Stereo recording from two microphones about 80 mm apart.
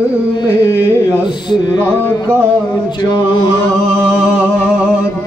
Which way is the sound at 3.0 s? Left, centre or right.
Left.